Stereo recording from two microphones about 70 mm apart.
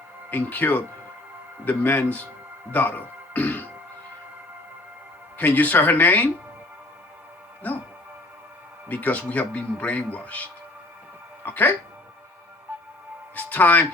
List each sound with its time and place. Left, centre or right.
0.3 s speech: left
5.4 s speech: left
8.9 s speech: left
13.3 s speech: left